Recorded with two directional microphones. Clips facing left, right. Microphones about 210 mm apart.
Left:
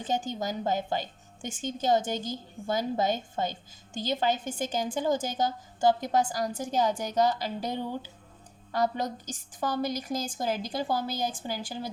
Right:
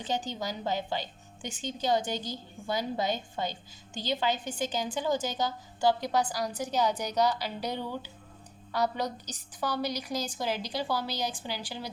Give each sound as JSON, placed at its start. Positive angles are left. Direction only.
{"t": 0.0, "sound": "a woman's voice", "side_deg": 50}